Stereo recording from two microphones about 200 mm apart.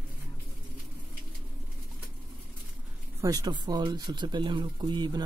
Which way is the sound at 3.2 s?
20° right (ahead or behind).